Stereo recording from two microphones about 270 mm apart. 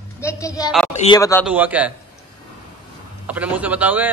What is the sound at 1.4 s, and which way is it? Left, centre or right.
Speech, centre.